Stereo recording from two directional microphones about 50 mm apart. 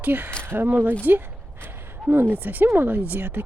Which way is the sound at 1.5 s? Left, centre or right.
Right.